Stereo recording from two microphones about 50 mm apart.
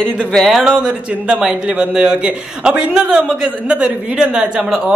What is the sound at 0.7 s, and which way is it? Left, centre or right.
A man's voice, centre.